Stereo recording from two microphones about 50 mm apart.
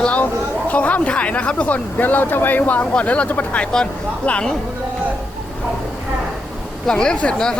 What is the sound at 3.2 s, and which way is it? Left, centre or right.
Speech, left.